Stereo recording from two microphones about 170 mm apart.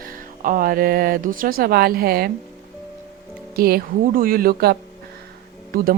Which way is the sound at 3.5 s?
60° right (ahead or behind).